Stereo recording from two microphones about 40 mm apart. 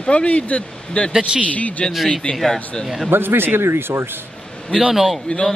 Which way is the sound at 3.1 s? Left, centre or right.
Right.